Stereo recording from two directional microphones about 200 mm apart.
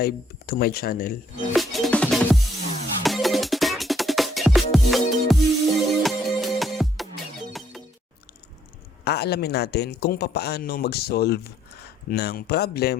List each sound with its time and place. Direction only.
0.0 s speech: 50° left (ahead or behind)
1.5 s music: centre (ahead or behind)
9.0 s speech: 55° left (ahead or behind)